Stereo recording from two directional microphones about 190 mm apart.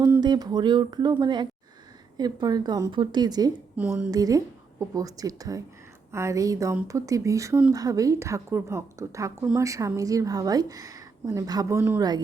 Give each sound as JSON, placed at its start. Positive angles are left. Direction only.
{"t": 0.2, "sound": "a woman's voice", "side_deg": -20}
{"t": 3.8, "sound": "a woman's voice", "side_deg": -5}
{"t": 4.1, "sound": "a woman's voice", "side_deg": -20}